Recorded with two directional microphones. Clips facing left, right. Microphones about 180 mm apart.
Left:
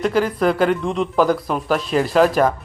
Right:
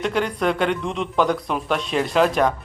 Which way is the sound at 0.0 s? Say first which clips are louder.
Left 4 dB; centre (ahead or behind).